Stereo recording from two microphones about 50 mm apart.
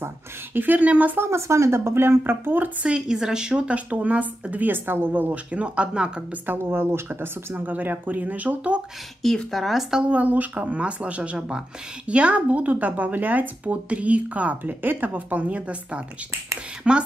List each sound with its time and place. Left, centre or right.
0.6 s speech: right
1.1 s speech: right
2.8 s speech: centre
6.4 s speech: right
9.2 s speech: centre
9.8 s speech: centre
10.1 s speech: right